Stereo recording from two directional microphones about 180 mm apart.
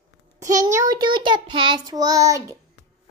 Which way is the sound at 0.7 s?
20° right (ahead or behind).